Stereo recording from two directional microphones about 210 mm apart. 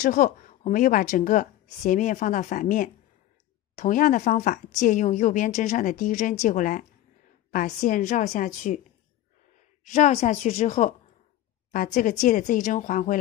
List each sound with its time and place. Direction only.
0.0 s speech: 40° left (ahead or behind)
9.8 s speech: 35° left (ahead or behind)